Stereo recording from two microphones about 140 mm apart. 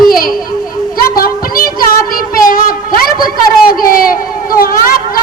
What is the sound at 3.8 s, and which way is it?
Speech, 90° left.